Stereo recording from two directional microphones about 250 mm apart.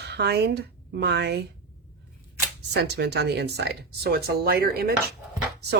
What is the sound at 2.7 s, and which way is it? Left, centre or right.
Speech, right.